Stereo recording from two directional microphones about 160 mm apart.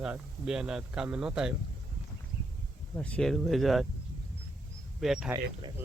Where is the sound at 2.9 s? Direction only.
5° left (ahead or behind).